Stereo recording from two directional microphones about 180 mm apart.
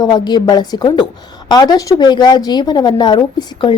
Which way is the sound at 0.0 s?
20° left (ahead or behind).